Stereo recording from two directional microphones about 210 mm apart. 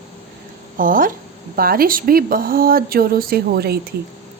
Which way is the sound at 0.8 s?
40° right (ahead or behind).